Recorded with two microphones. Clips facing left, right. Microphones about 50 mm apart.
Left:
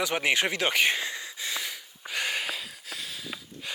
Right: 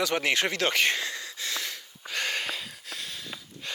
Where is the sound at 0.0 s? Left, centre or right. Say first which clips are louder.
Even; centre.